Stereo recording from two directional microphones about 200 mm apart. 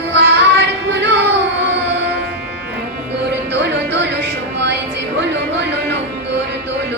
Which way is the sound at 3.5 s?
60° right (ahead or behind).